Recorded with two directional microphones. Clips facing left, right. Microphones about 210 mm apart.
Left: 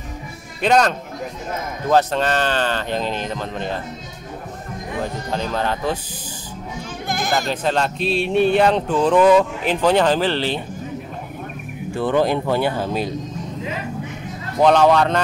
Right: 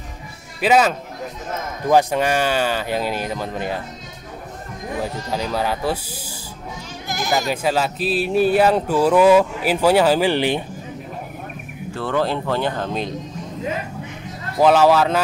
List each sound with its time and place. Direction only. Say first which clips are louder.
0.6 s speech: even; 5° right (ahead or behind)
5.0 s speech: left 1 dB; 10° right (ahead or behind)
7.1 s sheep: even; 55° left (ahead or behind)
7.3 s speech: right 1 dB; 10° right (ahead or behind)
11.9 s speech: left 3 dB; 15° left (ahead or behind)
14.6 s a man's voice: even; 5° right (ahead or behind)